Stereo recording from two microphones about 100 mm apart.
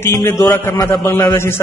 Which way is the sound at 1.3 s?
25° left (ahead or behind).